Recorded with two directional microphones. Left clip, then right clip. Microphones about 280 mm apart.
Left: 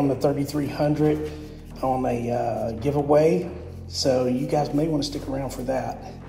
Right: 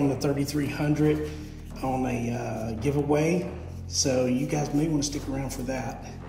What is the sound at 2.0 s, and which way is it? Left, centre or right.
Speech, centre.